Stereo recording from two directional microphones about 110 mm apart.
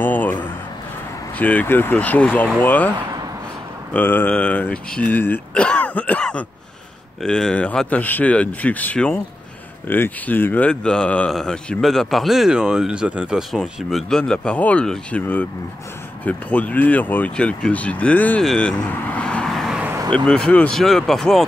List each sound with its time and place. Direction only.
0.0 s a sound: 15° left (ahead or behind)
1.4 s speech: 15° left (ahead or behind)
3.9 s speech: 15° left (ahead or behind)
18.4 s vehicle: 5° left (ahead or behind)
20.2 s speech: 5° left (ahead or behind)